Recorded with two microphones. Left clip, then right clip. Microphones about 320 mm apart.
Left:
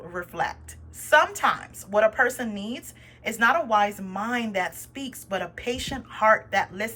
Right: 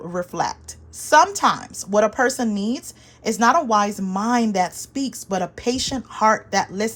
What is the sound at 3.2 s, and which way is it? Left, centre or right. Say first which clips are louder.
A woman's voice: right 5 dB; centre.